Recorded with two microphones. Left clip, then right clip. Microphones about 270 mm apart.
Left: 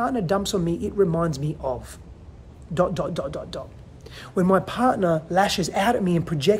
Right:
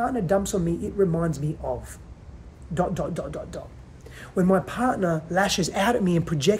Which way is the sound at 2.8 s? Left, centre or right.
Centre.